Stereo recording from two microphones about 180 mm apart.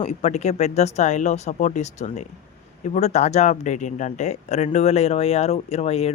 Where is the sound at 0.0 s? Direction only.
40° left (ahead or behind).